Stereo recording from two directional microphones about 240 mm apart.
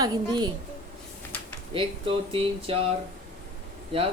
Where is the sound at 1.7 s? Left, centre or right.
Right.